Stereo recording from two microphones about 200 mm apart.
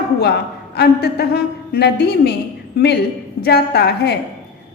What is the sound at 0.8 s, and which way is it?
A woman's voice, 55° left (ahead or behind).